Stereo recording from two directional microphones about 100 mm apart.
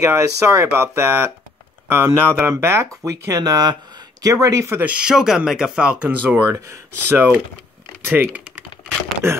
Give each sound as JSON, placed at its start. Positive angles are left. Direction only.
{"t": 0.0, "sound": "speech", "side_deg": -30}
{"t": 4.8, "sound": "speech", "side_deg": -10}
{"t": 6.5, "sound": "speech", "side_deg": -25}